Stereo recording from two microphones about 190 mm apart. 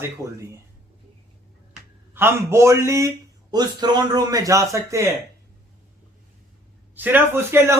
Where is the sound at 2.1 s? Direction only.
15° right (ahead or behind).